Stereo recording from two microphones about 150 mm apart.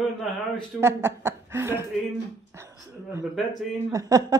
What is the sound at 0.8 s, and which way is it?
Speech, 15° right (ahead or behind).